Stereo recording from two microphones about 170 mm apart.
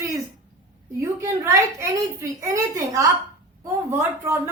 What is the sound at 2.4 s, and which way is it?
Speech, 20° right (ahead or behind).